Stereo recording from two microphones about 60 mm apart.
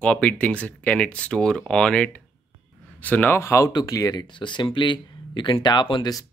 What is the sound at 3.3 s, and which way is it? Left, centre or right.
Speech, left.